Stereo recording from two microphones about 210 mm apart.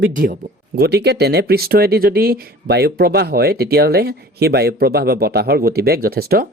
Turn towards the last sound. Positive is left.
turn(degrees=-45)  # may be behind; listen again after turning